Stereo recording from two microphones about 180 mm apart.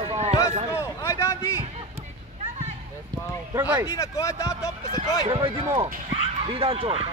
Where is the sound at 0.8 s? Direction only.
15° left (ahead or behind).